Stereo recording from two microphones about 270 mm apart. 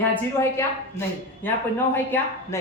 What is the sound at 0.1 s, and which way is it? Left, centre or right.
A woman's voice, centre.